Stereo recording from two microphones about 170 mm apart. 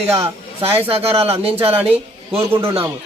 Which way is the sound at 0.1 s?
35° right (ahead or behind).